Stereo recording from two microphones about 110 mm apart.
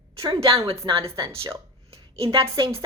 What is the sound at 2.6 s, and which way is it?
Speech, 45° right (ahead or behind).